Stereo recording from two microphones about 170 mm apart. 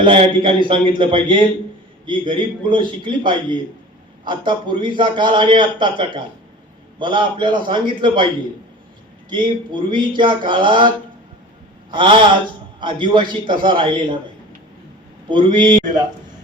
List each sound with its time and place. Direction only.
0.0 s a man's voice: 30° right (ahead or behind)
9.3 s a man's voice: 30° right (ahead or behind)
15.3 s a man's voice: 25° right (ahead or behind)